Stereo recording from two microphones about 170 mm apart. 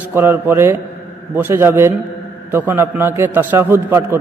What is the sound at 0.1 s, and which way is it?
A man's voice, 10° right (ahead or behind).